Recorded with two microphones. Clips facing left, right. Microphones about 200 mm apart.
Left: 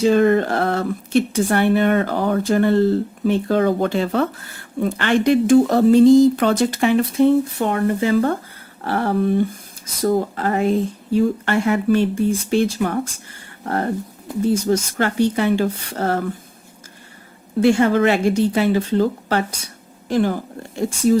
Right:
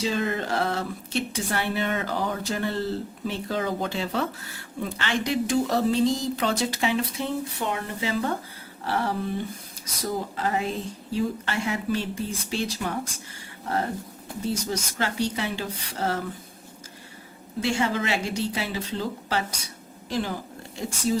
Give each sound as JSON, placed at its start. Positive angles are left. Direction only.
{"t": 0.0, "sound": "speech", "side_deg": 55}
{"t": 17.6, "sound": "speech", "side_deg": 55}